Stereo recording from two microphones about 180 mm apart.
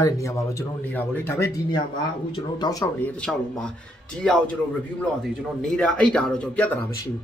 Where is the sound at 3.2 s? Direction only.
5° left (ahead or behind).